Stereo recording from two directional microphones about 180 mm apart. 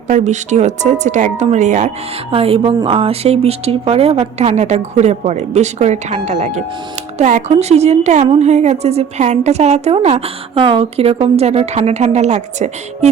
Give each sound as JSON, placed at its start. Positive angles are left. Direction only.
{"t": 0.1, "sound": "a woman's voice", "side_deg": -40}
{"t": 2.3, "sound": "a woman's voice", "side_deg": -30}